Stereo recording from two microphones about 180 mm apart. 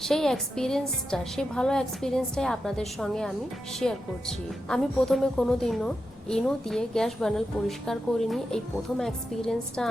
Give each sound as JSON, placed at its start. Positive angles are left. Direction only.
{"t": 0.0, "sound": "a woman's voice", "side_deg": 0}